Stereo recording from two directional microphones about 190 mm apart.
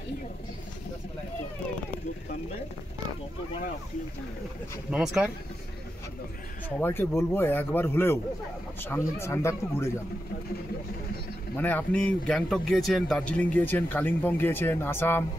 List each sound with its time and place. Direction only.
4.9 s speech: 5° right (ahead or behind)
6.8 s a man's voice: 10° left (ahead or behind)
11.5 s a man's voice: 10° left (ahead or behind)